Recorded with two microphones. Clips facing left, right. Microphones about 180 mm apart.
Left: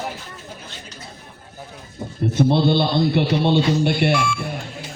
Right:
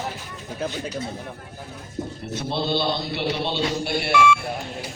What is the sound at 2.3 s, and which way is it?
A man's voice, 55° left (ahead or behind).